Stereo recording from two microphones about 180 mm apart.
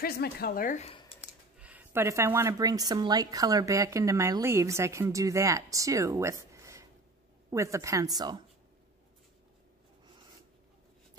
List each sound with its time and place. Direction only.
0.0 s speech: 60° left (ahead or behind)
1.6 s speech: 10° right (ahead or behind)